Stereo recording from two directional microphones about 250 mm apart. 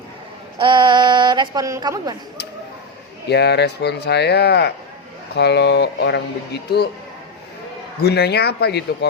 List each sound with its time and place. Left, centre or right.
0.6 s a woman's voice: centre
3.2 s speech: left
8.0 s speech: left